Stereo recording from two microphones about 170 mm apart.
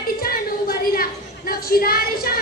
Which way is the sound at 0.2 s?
60° left (ahead or behind).